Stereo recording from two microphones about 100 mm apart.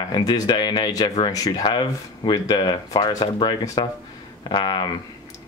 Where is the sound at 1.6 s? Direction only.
50° left (ahead or behind).